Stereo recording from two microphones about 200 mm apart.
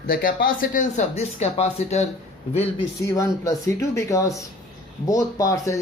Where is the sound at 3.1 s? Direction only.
15° left (ahead or behind).